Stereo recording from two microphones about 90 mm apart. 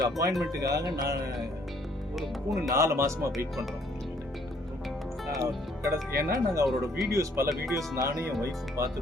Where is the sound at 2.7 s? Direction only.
35° right (ahead or behind).